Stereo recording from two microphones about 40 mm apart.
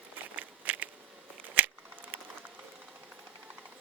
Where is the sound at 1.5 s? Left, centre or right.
Right.